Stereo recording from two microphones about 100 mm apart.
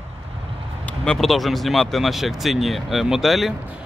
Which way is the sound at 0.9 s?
5° left (ahead or behind).